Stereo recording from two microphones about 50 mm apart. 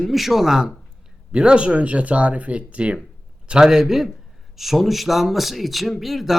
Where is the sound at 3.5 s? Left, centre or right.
Centre.